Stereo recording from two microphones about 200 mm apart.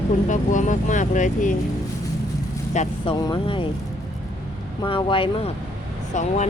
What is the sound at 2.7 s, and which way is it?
Speech, 35° left (ahead or behind).